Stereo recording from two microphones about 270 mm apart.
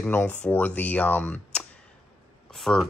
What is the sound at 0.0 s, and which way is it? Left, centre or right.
Speech, centre.